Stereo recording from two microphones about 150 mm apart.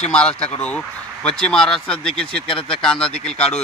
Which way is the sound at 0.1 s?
5° left (ahead or behind).